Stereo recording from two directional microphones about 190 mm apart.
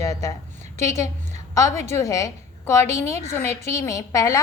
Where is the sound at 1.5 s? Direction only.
15° left (ahead or behind).